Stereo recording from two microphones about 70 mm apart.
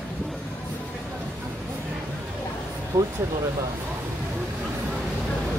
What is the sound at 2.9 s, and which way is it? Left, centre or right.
Speech, right.